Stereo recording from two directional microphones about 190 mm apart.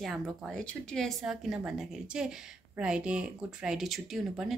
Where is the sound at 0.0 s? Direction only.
Centre (ahead or behind).